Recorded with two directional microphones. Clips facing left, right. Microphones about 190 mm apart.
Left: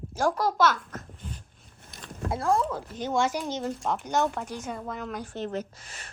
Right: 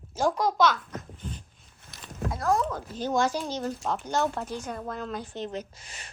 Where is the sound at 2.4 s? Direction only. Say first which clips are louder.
Even; 30° left (ahead or behind); by 6.1 s 5° left (ahead or behind).